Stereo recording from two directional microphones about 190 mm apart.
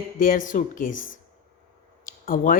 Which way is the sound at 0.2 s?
45° left (ahead or behind).